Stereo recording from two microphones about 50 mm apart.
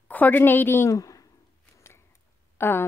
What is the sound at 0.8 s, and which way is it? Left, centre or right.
Speech, left.